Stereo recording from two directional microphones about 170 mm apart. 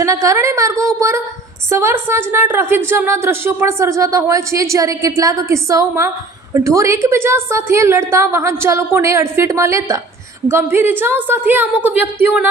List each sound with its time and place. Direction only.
0.0 s a woman's voice: 20° right (ahead or behind)